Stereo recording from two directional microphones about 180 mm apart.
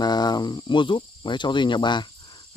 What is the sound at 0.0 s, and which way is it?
Speech, 25° left (ahead or behind).